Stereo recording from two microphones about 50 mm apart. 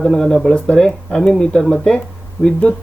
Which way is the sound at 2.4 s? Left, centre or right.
Left.